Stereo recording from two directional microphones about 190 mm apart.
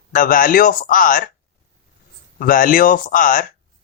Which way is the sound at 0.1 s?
45° left (ahead or behind).